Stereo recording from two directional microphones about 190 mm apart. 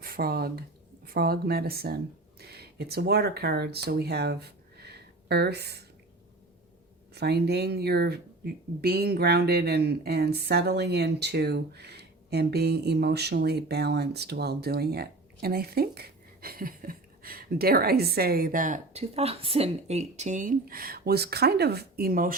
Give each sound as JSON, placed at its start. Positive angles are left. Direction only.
{"t": 0.0, "sound": "speech", "side_deg": -50}
{"t": 7.1, "sound": "speech", "side_deg": -60}